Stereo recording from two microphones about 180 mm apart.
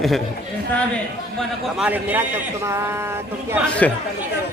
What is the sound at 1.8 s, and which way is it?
A man's voice, 10° right (ahead or behind).